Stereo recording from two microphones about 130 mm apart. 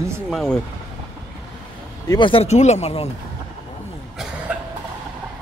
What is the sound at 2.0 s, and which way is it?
Speech, 35° left (ahead or behind).